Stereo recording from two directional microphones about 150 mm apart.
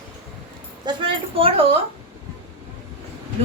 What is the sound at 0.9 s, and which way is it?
Speech, 35° right (ahead or behind).